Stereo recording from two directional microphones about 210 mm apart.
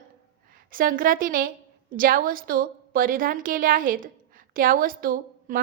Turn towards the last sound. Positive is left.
turn(degrees=-45)  # may be behind; listen again after turning